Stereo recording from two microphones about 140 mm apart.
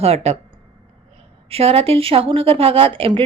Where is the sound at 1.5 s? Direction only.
45° right (ahead or behind).